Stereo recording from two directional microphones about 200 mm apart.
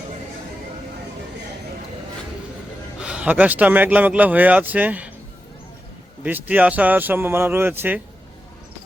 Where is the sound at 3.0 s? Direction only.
5° right (ahead or behind).